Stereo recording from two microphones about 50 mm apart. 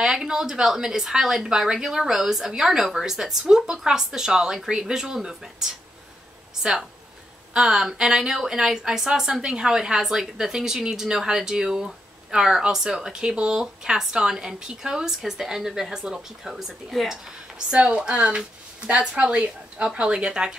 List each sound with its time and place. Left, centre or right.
0.0 s a woman's voice: centre
17.7 s speech: centre